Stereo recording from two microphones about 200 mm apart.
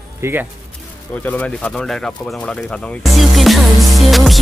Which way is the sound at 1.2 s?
5° left (ahead or behind).